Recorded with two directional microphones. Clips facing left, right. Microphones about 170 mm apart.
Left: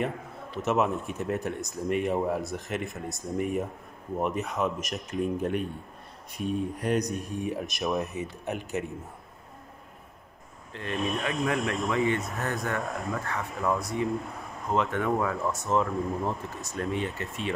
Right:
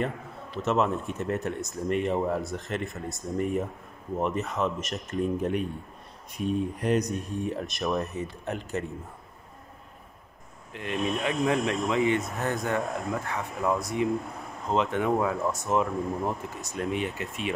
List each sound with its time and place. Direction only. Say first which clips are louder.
0.7 s speech: right 1 dB; 5° left (ahead or behind)
4.5 s speech: even; 10° left (ahead or behind)
10.7 s speech: right 1 dB; 15° right (ahead or behind)